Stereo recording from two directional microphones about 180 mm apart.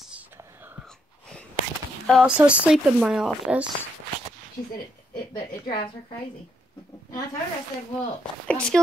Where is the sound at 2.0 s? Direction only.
5° right (ahead or behind).